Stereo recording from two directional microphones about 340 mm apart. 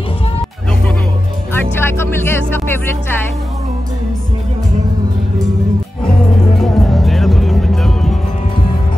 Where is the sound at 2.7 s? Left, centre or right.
Centre.